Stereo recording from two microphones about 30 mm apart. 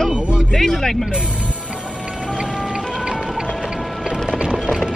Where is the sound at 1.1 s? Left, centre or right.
Right.